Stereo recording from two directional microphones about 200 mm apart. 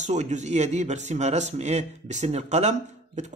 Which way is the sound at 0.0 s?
35° right (ahead or behind).